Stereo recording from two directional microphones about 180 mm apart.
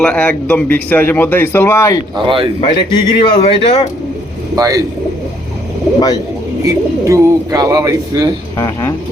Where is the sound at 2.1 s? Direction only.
30° right (ahead or behind).